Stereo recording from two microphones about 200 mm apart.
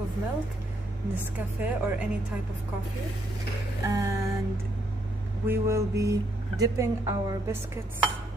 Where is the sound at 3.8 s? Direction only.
15° right (ahead or behind).